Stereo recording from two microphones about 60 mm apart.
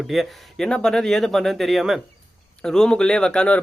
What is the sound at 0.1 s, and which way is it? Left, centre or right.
Speech, centre.